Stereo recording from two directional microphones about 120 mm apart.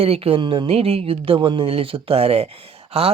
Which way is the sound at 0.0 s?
55° right (ahead or behind).